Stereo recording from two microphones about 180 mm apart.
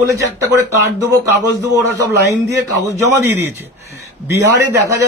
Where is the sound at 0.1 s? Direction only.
15° right (ahead or behind).